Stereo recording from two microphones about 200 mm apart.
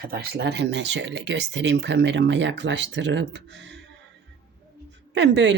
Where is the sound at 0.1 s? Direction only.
50° right (ahead or behind).